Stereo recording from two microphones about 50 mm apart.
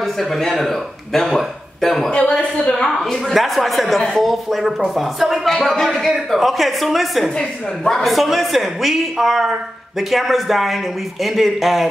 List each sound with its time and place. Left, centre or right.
0.0 s speech: centre
2.1 s a man's voice: left
3.0 s speech: centre
7.3 s a woman's voice: centre
8.0 s speech: centre